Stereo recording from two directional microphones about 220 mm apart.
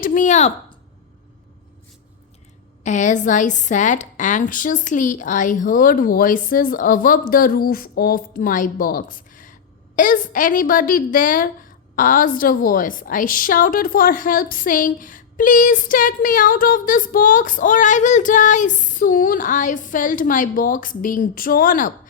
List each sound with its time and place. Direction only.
0.0 s a woman's voice: 35° left (ahead or behind)
2.8 s a woman's voice: 35° left (ahead or behind)